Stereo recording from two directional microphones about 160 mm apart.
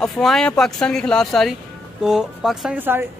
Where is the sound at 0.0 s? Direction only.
5° left (ahead or behind).